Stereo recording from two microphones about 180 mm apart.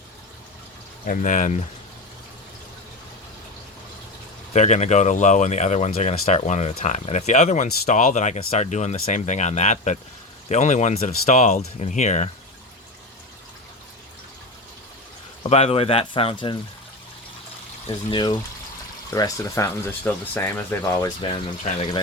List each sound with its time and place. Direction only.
1.0 s speech: 50° left (ahead or behind)
4.5 s speech: 40° left (ahead or behind)
15.4 s speech: 35° left (ahead or behind)
17.8 s speech: 25° left (ahead or behind)
21.7 s speech: 40° left (ahead or behind)